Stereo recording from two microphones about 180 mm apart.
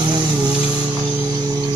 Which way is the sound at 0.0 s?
25° right (ahead or behind).